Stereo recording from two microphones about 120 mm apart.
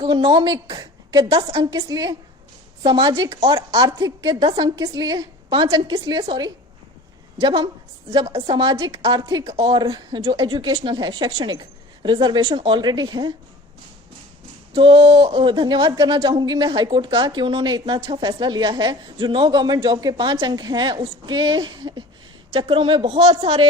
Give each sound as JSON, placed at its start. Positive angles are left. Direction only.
{"t": 0.0, "sound": "a woman's voice", "side_deg": -45}
{"t": 1.3, "sound": "a woman's voice", "side_deg": -45}
{"t": 1.9, "sound": "a woman's voice", "side_deg": -30}
{"t": 14.8, "sound": "a woman's voice", "side_deg": -45}
{"t": 22.5, "sound": "a woman's voice", "side_deg": -50}
{"t": 23.0, "sound": "speech", "side_deg": -60}